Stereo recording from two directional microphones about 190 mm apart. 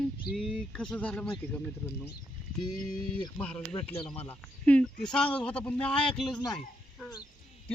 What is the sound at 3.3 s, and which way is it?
Speech, 5° left (ahead or behind).